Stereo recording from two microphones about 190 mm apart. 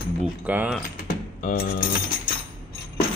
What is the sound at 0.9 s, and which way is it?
Typing, 50° left (ahead or behind).